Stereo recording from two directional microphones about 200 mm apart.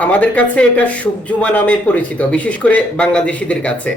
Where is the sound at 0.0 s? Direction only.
10° left (ahead or behind).